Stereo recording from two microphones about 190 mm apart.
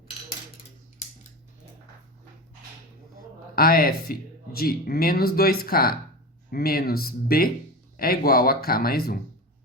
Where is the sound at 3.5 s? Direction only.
50° left (ahead or behind).